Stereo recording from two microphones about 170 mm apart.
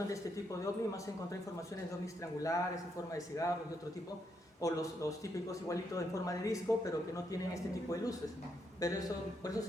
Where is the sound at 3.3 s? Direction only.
20° left (ahead or behind).